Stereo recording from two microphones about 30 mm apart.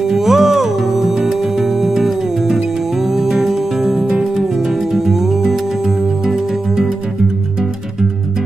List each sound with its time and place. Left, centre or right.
0.0 s music: centre
4.0 s music: right
4.4 s music: centre